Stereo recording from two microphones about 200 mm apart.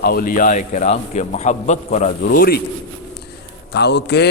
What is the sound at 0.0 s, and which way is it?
A man's voice, 50° left (ahead or behind).